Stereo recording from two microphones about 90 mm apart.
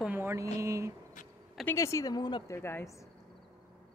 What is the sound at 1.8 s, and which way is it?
Speech, 35° left (ahead or behind).